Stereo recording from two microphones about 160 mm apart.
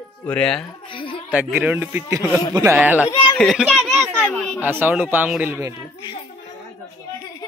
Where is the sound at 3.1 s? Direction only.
25° left (ahead or behind).